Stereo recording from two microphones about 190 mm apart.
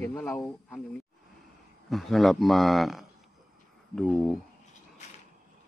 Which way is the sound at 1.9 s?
Centre (ahead or behind).